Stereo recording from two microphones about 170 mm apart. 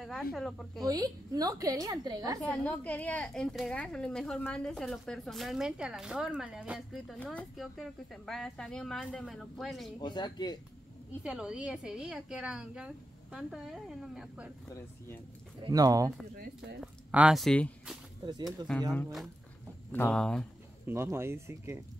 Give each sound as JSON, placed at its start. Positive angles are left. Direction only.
{"t": 0.2, "sound": "a woman's voice", "side_deg": 5}
{"t": 0.8, "sound": "a woman's voice", "side_deg": -20}
{"t": 2.4, "sound": "a woman's voice", "side_deg": 5}
{"t": 9.9, "sound": "speech", "side_deg": 25}
{"t": 11.2, "sound": "a woman's voice", "side_deg": -5}
{"t": 15.6, "sound": "a woman's voice", "side_deg": -20}
{"t": 16.3, "sound": "speech", "side_deg": -70}
{"t": 16.8, "sound": "speech", "side_deg": -5}
{"t": 18.2, "sound": "a woman's voice", "side_deg": -25}
{"t": 19.9, "sound": "speech", "side_deg": 10}
{"t": 20.8, "sound": "speech", "side_deg": -15}